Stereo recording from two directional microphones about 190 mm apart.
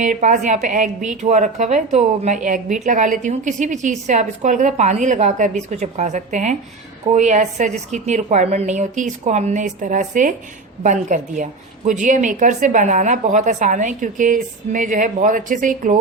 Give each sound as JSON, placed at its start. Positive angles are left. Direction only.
{"t": 0.0, "sound": "a woman's voice", "side_deg": -40}